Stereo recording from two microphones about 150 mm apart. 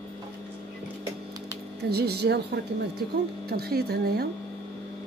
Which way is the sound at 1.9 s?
90° right.